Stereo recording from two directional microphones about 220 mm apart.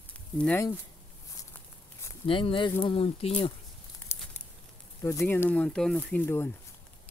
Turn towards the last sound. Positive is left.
turn(degrees=10)  # may be behind; listen again after turning